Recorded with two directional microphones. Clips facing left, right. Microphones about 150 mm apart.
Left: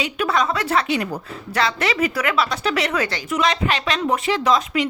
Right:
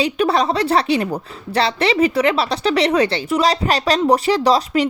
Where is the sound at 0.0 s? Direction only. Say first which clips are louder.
Right 4 dB; 35° right (ahead or behind).